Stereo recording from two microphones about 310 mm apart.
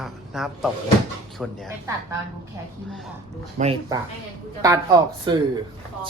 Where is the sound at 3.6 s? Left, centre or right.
Centre.